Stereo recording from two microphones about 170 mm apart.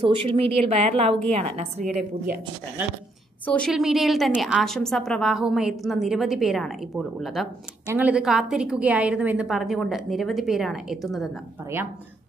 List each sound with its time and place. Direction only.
0.1 s speech: 35° right (ahead or behind)
3.4 s a woman's voice: 5° left (ahead or behind)
7.8 s a woman's voice: 10° right (ahead or behind)